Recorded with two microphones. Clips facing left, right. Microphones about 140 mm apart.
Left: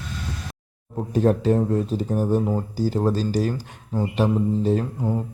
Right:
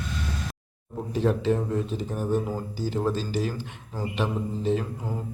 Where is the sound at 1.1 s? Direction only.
45° left (ahead or behind).